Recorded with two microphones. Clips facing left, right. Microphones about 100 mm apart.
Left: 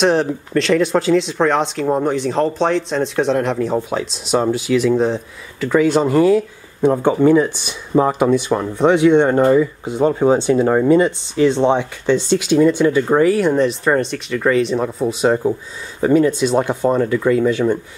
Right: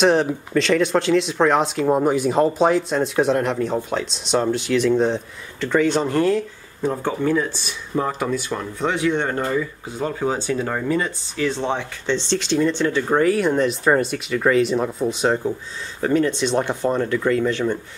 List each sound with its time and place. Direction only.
0.0 s speech: centre (ahead or behind); by 12.2 s 20° left (ahead or behind)
12.2 s speech: 10° left (ahead or behind)